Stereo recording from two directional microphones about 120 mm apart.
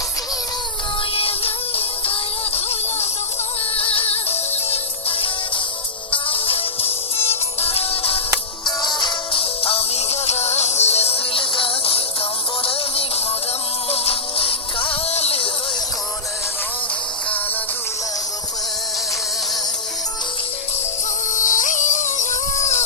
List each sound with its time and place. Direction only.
1.1 s music: 50° left (ahead or behind)
3.8 s music: 50° left (ahead or behind)
8.6 s music: 40° left (ahead or behind); by 15.4 s 55° left (ahead or behind)
21.3 s music: 90° left; by 22.8 s 75° left (ahead or behind)